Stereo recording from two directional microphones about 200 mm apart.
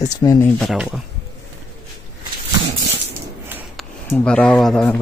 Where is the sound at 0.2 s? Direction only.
15° left (ahead or behind).